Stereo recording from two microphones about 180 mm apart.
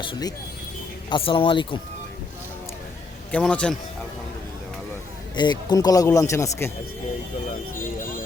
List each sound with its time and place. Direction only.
0.0 s speech: 25° left (ahead or behind)
3.3 s a man's voice: 5° left (ahead or behind)
5.4 s speech: 25° left (ahead or behind)